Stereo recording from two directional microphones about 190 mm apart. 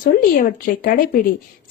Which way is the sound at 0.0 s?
45° left (ahead or behind).